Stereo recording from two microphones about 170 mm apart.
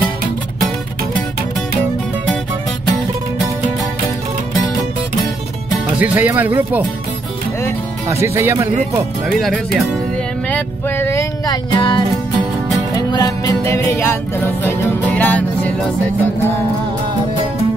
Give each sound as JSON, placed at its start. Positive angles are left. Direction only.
{"t": 5.7, "sound": "speech", "side_deg": -10}
{"t": 8.1, "sound": "speech", "side_deg": -15}
{"t": 9.3, "sound": "speech", "side_deg": 0}
{"t": 10.5, "sound": "music", "side_deg": 15}